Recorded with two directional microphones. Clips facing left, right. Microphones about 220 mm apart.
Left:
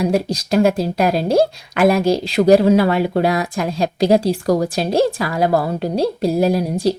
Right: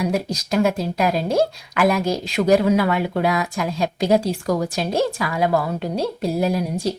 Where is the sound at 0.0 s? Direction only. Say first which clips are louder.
Left 4 dB; 30° left (ahead or behind).